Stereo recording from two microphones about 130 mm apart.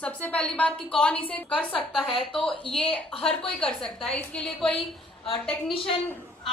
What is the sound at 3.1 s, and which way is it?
Speech, 45° left (ahead or behind).